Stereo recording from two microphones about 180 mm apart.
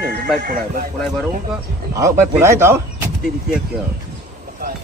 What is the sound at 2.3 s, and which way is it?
Speech, 15° right (ahead or behind).